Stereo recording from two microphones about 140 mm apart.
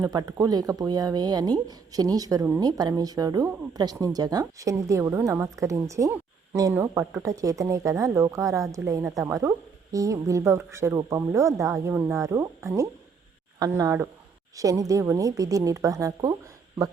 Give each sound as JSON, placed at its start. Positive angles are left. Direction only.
{"t": 0.0, "sound": "a woman's voice", "side_deg": -25}